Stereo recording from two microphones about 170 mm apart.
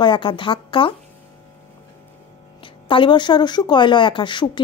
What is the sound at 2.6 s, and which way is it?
Speech, 30° left (ahead or behind).